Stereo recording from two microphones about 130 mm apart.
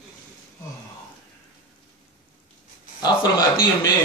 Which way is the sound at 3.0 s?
30° left (ahead or behind).